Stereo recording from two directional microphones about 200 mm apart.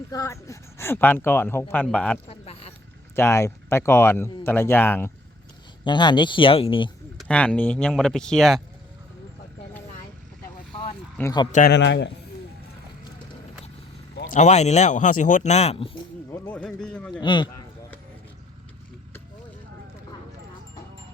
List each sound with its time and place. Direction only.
0.1 s speech: 15° left (ahead or behind)
2.2 s a sound: 30° left (ahead or behind)
3.2 s speech: 15° left (ahead or behind)
5.8 s speech: 25° left (ahead or behind)
7.2 s speech: 5° left (ahead or behind)
11.2 s speech: 15° left (ahead or behind)
11.7 s a man's voice: 65° left (ahead or behind)
14.3 s speech: 35° left (ahead or behind)
16.3 s speech: 5° left (ahead or behind)
17.2 s speech: 25° left (ahead or behind)